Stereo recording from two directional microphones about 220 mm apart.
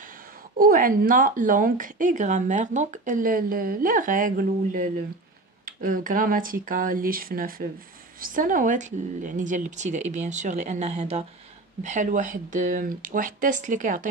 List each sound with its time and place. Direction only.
0.6 s a woman's voice: 40° right (ahead or behind)